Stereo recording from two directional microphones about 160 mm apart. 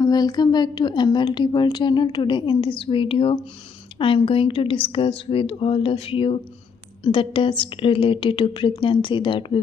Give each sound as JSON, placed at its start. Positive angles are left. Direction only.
{"t": 0.0, "sound": "a woman's voice", "side_deg": 25}